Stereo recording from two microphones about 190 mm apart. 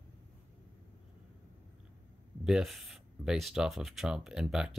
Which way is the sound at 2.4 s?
Centre (ahead or behind).